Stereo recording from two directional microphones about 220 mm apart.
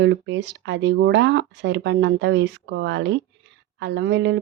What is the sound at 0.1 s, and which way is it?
Speech, 55° right (ahead or behind).